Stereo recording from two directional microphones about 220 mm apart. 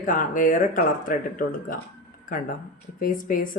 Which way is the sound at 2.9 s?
40° left (ahead or behind).